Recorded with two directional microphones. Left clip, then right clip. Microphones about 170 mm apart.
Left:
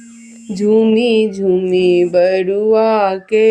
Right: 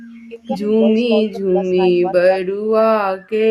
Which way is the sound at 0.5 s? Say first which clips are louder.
Left 3 dB; 25° left (ahead or behind).